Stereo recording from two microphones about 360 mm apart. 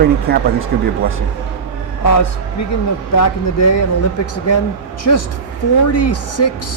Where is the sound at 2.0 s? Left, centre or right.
Left.